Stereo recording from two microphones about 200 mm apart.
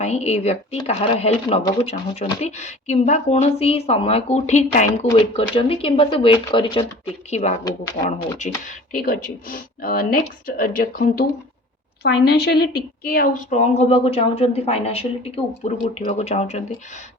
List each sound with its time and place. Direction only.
0.0 s a woman's voice: 35° left (ahead or behind)
7.6 s speech: 20° left (ahead or behind)
8.9 s speech: 45° left (ahead or behind)
12.0 s a woman's voice: 55° left (ahead or behind); by 16.6 s 30° left (ahead or behind)